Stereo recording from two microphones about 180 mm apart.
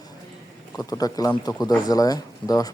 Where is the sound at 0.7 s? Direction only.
20° left (ahead or behind).